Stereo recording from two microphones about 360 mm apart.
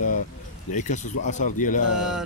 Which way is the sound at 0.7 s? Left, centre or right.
Centre.